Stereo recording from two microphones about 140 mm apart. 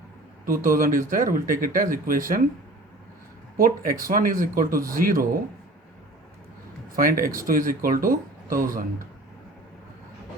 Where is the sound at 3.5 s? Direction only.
90° right.